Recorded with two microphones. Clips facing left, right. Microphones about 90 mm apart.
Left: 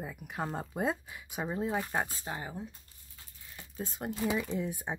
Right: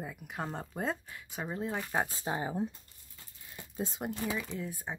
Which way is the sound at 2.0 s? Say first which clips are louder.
Right 5 dB; 25° right (ahead or behind).